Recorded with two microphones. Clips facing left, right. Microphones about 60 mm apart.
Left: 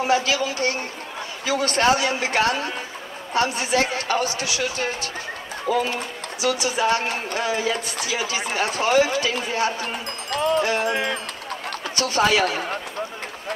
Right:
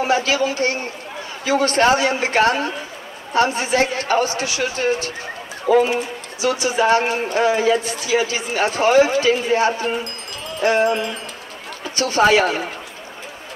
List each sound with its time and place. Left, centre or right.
0.0 s a man's voice: right
10.3 s music: left
10.6 s music: right
10.9 s speech: left
11.9 s speech: right